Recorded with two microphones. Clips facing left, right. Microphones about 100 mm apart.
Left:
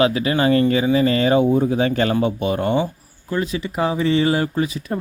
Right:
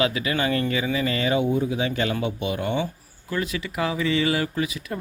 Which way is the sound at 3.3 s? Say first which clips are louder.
Left 5 dB; 30° left (ahead or behind).